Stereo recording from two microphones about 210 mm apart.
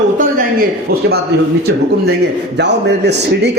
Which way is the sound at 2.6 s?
55° right (ahead or behind).